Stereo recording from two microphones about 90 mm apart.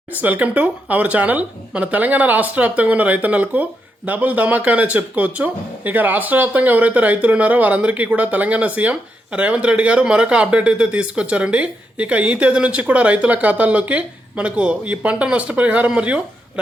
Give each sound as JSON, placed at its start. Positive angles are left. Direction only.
{"t": 0.2, "sound": "speech", "side_deg": -15}